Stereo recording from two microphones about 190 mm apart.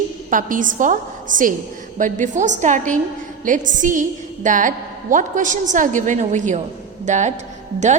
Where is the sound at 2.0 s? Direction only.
40° right (ahead or behind).